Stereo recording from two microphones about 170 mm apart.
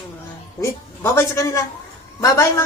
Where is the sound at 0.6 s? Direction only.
15° left (ahead or behind).